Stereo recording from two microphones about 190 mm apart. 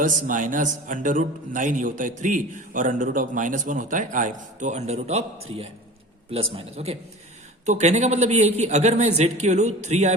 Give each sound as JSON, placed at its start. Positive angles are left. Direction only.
{"t": 0.0, "sound": "a man's voice", "side_deg": -45}